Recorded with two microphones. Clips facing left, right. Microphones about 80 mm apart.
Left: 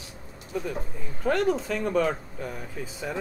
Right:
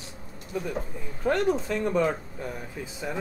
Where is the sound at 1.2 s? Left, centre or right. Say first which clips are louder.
Even; centre.